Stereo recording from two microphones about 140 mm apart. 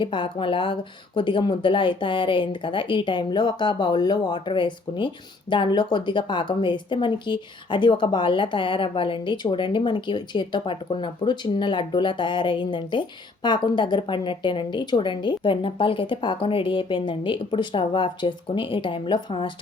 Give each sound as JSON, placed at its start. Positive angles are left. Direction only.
{"t": 0.0, "sound": "speech", "side_deg": 35}